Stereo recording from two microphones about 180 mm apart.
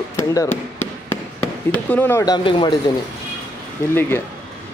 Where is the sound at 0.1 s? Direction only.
15° left (ahead or behind).